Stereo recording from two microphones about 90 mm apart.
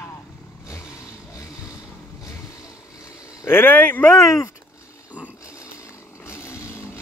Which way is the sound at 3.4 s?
25° left (ahead or behind).